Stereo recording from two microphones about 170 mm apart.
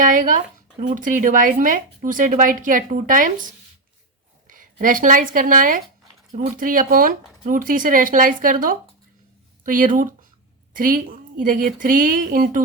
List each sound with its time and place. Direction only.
0.0 s speech: 50° right (ahead or behind)
4.4 s speech: 50° right (ahead or behind)